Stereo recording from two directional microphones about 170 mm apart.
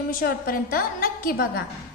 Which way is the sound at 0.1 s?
55° left (ahead or behind).